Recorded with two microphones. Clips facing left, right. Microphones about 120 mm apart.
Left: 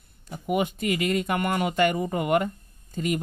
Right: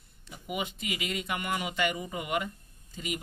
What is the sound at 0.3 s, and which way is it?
Speech, 50° left (ahead or behind).